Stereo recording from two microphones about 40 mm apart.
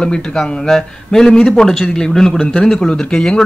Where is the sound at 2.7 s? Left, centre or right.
Left.